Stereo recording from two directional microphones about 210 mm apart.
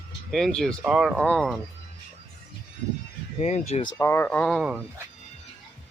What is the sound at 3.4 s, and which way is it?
Speech, 30° left (ahead or behind).